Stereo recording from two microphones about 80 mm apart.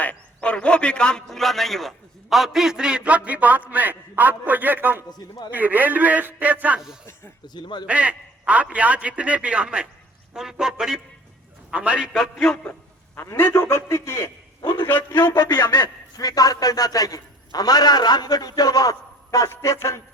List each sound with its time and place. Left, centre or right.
0.0 s a man's voice: centre; by 5.0 s right
5.1 s speech: left
5.5 s a man's voice: right
7.4 s speech: left
7.9 s a man's voice: centre
13.1 s a man's voice: left
14.6 s a man's voice: left
14.8 s a man's voice: left
15.4 s a man's voice: left
16.2 s a man's voice: left
19.5 s a man's voice: left